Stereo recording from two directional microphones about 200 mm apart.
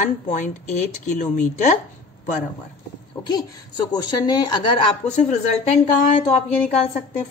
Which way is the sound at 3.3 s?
20° left (ahead or behind).